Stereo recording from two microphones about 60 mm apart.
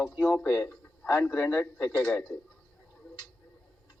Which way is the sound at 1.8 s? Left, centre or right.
Centre.